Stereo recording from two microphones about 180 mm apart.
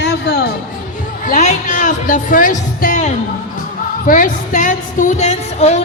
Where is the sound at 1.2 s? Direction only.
40° left (ahead or behind).